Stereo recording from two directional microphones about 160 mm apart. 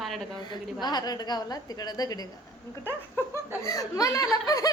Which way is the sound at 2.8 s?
15° right (ahead or behind).